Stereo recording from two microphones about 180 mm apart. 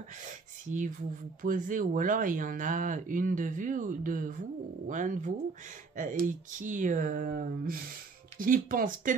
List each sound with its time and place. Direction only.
0.2 s speech: 45° right (ahead or behind)